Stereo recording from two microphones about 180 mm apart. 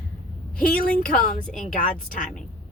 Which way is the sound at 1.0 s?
50° left (ahead or behind).